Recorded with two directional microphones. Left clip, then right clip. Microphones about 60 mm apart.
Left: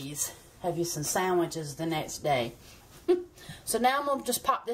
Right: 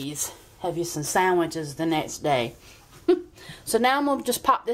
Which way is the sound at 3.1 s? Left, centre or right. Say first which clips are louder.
Right 5 dB; right.